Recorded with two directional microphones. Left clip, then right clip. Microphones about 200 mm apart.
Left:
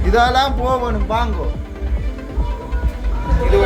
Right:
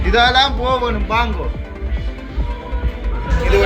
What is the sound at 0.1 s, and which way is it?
A man's voice, 30° left (ahead or behind).